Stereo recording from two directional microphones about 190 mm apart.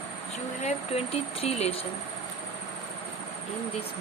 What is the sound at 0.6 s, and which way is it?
Speech, 30° left (ahead or behind).